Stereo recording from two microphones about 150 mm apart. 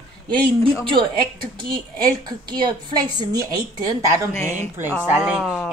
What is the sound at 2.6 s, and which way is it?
Speech, 30° right (ahead or behind).